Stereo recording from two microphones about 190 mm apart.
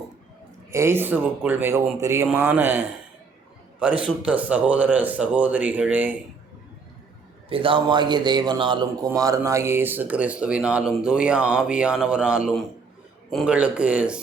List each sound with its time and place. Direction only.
0.7 s speech: 15° right (ahead or behind)
7.5 s a man's voice: 25° right (ahead or behind); by 14.2 s 5° right (ahead or behind)